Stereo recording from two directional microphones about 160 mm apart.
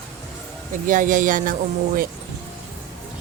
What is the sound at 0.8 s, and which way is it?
Speech, 55° right (ahead or behind).